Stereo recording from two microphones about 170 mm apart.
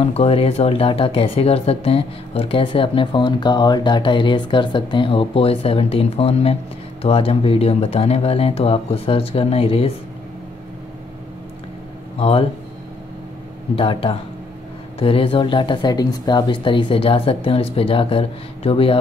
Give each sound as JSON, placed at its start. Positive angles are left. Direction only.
{"t": 0.0, "sound": "speech", "side_deg": 35}
{"t": 12.2, "sound": "speech", "side_deg": 35}
{"t": 13.7, "sound": "speech", "side_deg": 30}